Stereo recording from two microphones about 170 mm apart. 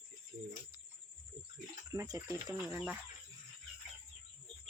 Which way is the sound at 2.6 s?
5° right (ahead or behind).